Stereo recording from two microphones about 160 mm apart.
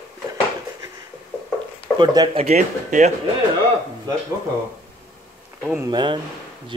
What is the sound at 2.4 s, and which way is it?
Speech, 45° right (ahead or behind).